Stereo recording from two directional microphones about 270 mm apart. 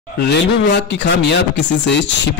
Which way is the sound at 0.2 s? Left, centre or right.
Left.